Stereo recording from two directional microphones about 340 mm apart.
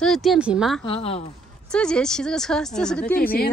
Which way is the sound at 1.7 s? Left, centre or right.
Centre.